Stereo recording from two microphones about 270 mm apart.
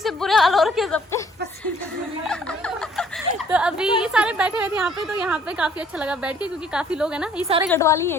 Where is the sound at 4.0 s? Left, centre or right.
Centre.